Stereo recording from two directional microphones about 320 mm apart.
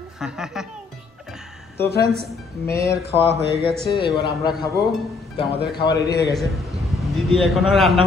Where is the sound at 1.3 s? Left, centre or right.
Centre.